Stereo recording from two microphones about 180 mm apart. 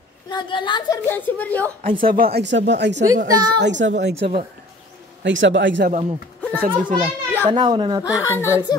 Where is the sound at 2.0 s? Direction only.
55° right (ahead or behind); by 3.0 s 75° right (ahead or behind).